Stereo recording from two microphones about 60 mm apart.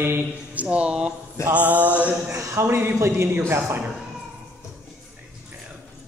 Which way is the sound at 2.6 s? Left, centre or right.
Right.